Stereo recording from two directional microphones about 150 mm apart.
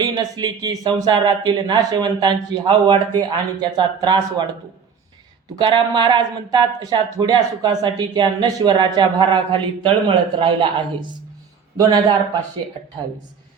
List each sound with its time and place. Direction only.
0.0 s speech: 25° right (ahead or behind)
5.5 s speech: 30° right (ahead or behind)